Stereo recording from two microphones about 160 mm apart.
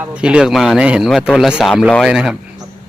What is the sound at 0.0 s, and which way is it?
A man's voice, 5° right (ahead or behind).